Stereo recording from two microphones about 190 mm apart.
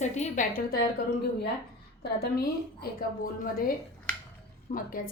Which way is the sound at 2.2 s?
55° left (ahead or behind).